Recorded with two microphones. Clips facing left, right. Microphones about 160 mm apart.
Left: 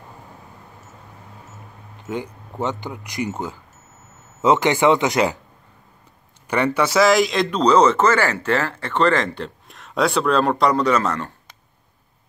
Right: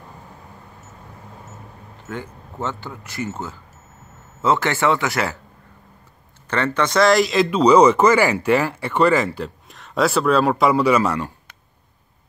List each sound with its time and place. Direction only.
2.0 s speech: 15° left (ahead or behind)
6.4 s speech: 10° left (ahead or behind); by 11.3 s 10° right (ahead or behind)